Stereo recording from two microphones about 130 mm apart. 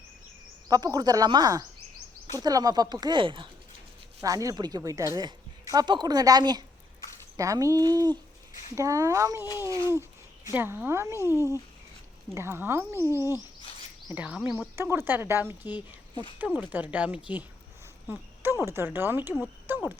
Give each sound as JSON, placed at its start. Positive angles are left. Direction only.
{"t": 0.7, "sound": "speech", "side_deg": -30}
{"t": 4.2, "sound": "speech", "side_deg": -25}
{"t": 10.5, "sound": "speech", "side_deg": -15}